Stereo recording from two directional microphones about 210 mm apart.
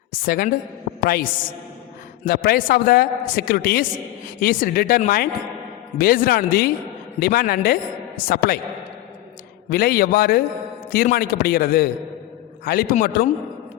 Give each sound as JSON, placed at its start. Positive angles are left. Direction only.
{"t": 0.1, "sound": "a man's voice", "side_deg": 45}
{"t": 9.6, "sound": "a man's voice", "side_deg": 45}